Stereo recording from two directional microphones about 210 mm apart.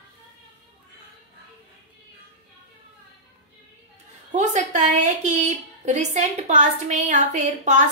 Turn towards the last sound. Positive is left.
turn(degrees=-35)  # may be behind; listen again after turning